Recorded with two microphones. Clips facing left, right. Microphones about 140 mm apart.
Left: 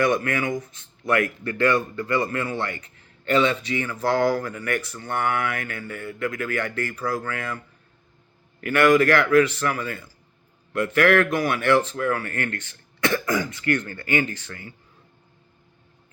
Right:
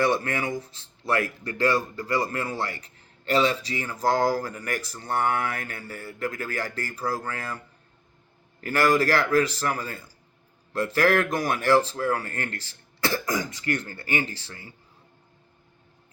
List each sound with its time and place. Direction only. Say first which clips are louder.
0.0 s speech: left 2 dB; 30° right (ahead or behind)
8.6 s speech: left 4 dB; 35° right (ahead or behind)